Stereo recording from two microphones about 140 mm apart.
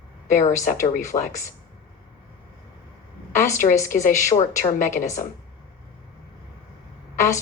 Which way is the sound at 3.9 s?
60° left (ahead or behind).